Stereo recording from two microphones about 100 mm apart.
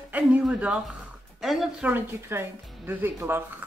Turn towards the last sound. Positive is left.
turn(degrees=-20)  # may be behind; listen again after turning